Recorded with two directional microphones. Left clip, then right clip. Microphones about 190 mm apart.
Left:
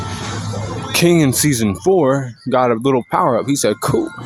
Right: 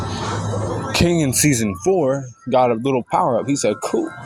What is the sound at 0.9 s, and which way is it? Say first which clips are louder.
Speech: left 5 dB; 20° left (ahead or behind).